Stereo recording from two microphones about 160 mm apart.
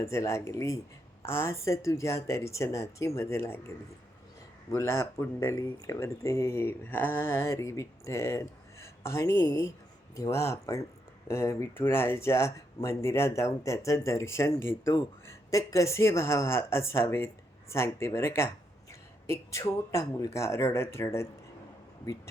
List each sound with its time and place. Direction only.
0.0 s speech: 20° left (ahead or behind)
4.7 s speech: 15° left (ahead or behind)